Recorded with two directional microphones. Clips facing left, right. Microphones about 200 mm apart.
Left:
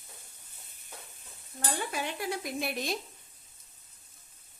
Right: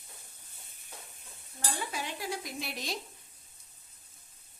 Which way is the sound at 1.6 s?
55° left (ahead or behind).